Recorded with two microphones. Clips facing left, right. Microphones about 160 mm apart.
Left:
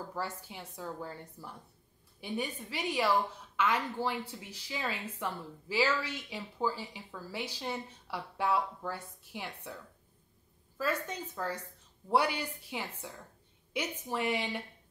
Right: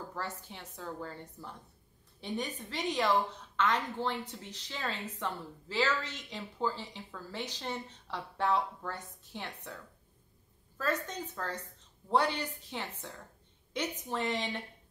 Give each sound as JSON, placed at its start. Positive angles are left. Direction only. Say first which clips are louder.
{"t": 0.1, "sound": "a woman's voice", "louder": "left 2 dB", "side_deg": 10}
{"t": 10.8, "sound": "a woman's voice", "louder": "even", "side_deg": 10}